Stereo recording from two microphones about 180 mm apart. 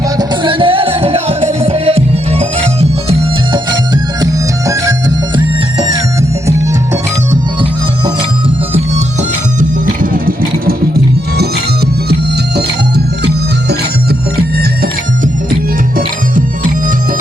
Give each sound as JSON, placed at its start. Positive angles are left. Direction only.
{"t": 0.2, "sound": "music", "side_deg": -30}
{"t": 3.2, "sound": "music", "side_deg": -20}
{"t": 9.6, "sound": "music", "side_deg": -50}